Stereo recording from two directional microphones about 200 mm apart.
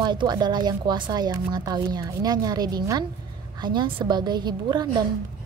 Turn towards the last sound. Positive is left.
turn(degrees=-20)  # may be behind; listen again after turning